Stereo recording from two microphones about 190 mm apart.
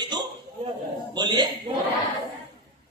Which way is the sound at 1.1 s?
25° right (ahead or behind).